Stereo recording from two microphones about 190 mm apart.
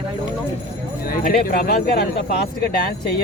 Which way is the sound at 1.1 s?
50° left (ahead or behind).